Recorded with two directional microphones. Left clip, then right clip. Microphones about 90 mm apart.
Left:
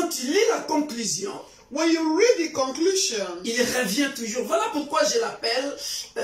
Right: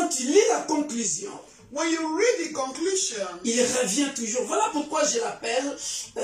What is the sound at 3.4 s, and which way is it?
Speech, 25° right (ahead or behind).